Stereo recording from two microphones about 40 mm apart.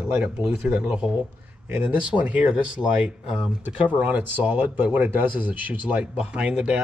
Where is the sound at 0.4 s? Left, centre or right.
Centre.